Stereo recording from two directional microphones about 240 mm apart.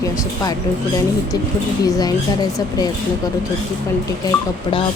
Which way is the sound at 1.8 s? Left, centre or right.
Centre.